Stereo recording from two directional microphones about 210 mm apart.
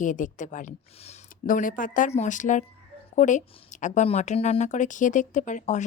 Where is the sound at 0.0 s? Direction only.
35° left (ahead or behind).